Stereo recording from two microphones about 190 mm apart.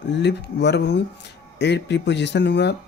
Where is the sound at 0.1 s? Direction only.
65° left (ahead or behind).